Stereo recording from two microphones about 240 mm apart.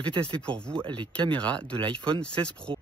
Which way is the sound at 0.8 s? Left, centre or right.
Right.